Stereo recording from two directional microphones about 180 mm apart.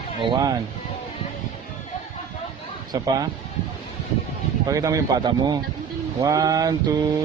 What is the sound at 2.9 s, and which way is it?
Speech, 20° right (ahead or behind).